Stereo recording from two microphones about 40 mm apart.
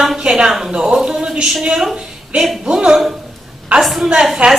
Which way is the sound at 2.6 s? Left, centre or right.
Centre.